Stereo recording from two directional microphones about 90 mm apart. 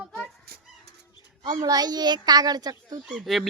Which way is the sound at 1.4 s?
45° right (ahead or behind).